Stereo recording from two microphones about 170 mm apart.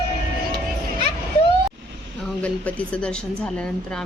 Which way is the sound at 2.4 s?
10° left (ahead or behind).